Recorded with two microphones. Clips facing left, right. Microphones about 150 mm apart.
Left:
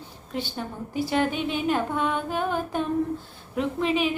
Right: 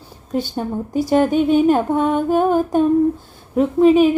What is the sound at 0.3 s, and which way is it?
Speech, 40° right (ahead or behind).